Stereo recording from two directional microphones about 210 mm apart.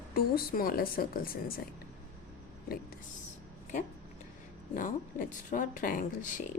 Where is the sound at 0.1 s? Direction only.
45° left (ahead or behind).